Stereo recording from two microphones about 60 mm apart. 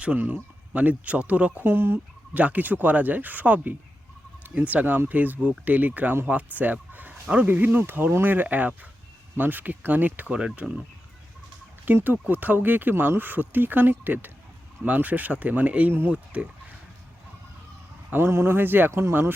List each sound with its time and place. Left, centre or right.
0.7 s speech: right
1.6 s speech: right
2.3 s speech: right
7.1 s a sound: centre
7.4 s speech: right
11.9 s speech: right
15.9 s speech: right
16.1 s speech: right
18.1 s speech: right